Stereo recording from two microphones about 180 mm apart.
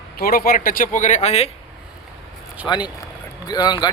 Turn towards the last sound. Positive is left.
turn(degrees=25)  # may be behind; listen again after turning